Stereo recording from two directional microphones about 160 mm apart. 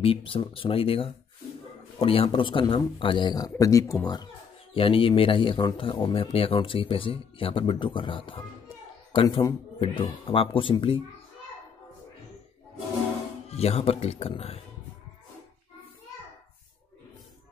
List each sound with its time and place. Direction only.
0.0 s speech: 35° left (ahead or behind)
13.5 s speech: 40° left (ahead or behind)